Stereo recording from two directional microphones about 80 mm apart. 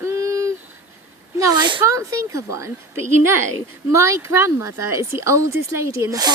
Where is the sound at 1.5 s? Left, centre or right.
Right.